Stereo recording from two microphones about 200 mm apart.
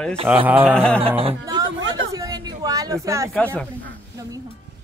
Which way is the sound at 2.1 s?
20° right (ahead or behind).